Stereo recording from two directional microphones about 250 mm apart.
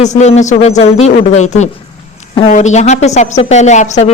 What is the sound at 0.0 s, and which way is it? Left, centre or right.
A woman's voice, left.